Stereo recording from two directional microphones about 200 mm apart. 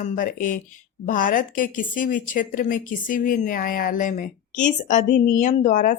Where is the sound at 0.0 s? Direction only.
40° left (ahead or behind).